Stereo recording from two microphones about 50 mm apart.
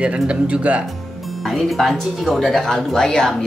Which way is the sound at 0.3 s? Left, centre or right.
Right.